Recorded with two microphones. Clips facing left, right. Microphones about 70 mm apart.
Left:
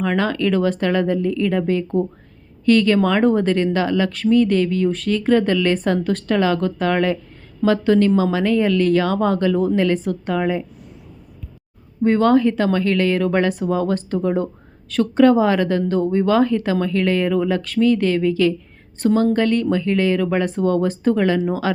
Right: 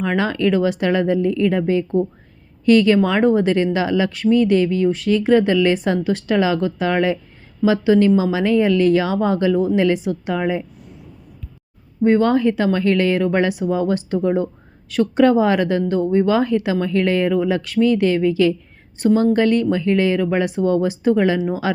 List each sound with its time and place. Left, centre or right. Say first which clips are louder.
0.0 s a woman's voice: right 1 dB; centre
12.0 s a woman's voice: even; centre
12.7 s speech: right 1 dB; right
13.0 s a woman's voice: right 1 dB; centre